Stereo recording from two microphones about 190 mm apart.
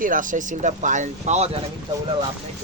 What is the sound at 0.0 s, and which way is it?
Speech, 45° right (ahead or behind).